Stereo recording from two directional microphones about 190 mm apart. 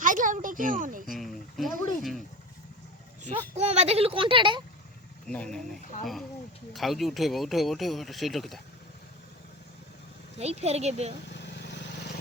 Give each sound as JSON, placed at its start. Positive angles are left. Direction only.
{"t": 0.0, "sound": "a child's voice", "side_deg": -45}
{"t": 1.1, "sound": "a sound", "side_deg": 0}
{"t": 3.5, "sound": "speech", "side_deg": -35}
{"t": 5.3, "sound": "speech", "side_deg": 5}
{"t": 6.7, "sound": "speech", "side_deg": 0}
{"t": 10.3, "sound": "speech", "side_deg": -35}
{"t": 11.3, "sound": "vehicle", "side_deg": 65}